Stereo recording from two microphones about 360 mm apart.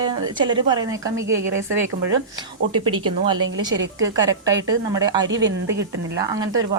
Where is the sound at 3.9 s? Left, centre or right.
Right.